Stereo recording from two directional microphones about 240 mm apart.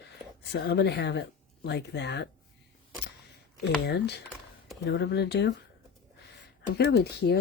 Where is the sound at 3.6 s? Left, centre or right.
Left.